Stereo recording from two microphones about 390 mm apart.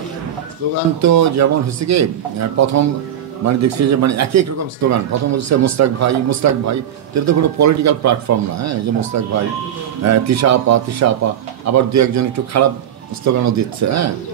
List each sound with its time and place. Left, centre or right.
0.7 s speech: right